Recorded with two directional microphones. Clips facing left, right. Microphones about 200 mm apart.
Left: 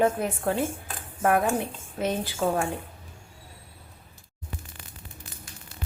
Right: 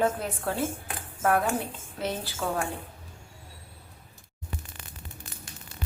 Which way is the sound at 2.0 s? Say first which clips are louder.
Left 4 dB; 15° left (ahead or behind).